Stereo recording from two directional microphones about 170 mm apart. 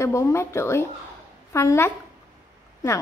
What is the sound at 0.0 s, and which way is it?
A woman's voice, 15° left (ahead or behind).